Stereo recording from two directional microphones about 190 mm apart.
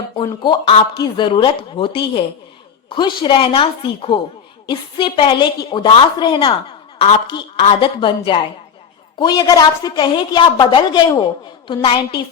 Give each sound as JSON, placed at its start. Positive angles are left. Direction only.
{"t": 0.2, "sound": "a woman's voice", "side_deg": 25}